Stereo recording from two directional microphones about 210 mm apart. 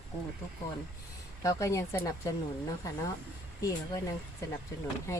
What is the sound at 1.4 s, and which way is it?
Speech, 15° left (ahead or behind).